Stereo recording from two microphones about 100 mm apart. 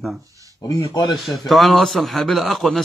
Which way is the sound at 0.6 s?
40° left (ahead or behind).